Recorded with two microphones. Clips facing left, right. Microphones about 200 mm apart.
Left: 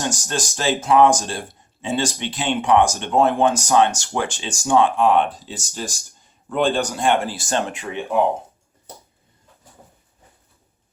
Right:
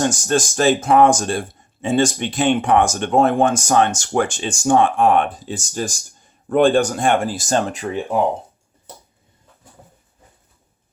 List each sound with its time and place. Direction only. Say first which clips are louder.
0.0 s speech: right 7 dB; 50° right (ahead or behind)